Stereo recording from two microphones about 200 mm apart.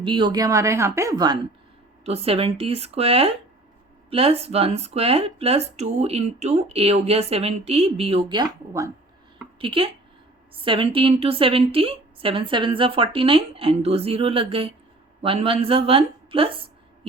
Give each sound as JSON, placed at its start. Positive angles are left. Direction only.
{"t": 0.0, "sound": "a woman's voice", "side_deg": -25}